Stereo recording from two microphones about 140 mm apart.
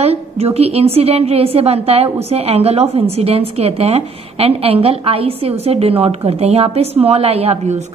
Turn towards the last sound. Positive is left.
turn(degrees=-50)  # may be behind; listen again after turning